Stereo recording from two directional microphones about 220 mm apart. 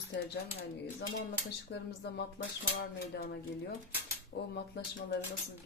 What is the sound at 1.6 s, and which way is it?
Speech, 50° left (ahead or behind).